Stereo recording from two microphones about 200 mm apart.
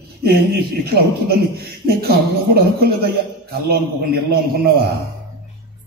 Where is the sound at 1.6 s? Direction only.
50° right (ahead or behind).